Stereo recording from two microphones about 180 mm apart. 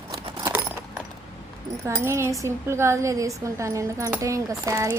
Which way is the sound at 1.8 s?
15° right (ahead or behind).